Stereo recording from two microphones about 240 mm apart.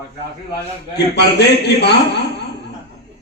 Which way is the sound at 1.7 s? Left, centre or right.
Left.